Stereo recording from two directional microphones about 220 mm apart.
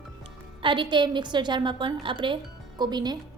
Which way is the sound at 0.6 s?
20° right (ahead or behind).